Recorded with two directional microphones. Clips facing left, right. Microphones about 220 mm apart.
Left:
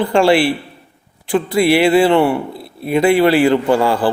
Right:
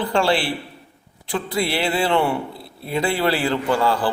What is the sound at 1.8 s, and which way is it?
Speech, 60° left (ahead or behind).